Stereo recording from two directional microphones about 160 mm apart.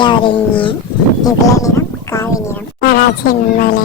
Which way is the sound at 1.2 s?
20° left (ahead or behind).